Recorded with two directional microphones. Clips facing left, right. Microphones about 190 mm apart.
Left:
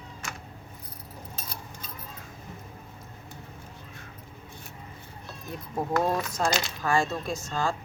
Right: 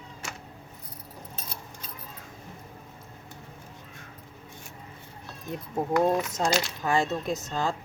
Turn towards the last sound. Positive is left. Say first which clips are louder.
# right 1 dB
turn(degrees=-20)  # may be behind; listen again after turning